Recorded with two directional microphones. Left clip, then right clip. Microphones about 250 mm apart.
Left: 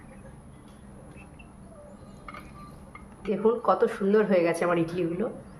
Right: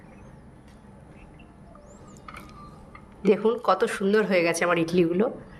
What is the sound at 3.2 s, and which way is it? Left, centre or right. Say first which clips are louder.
Speech: right 2 dB; right.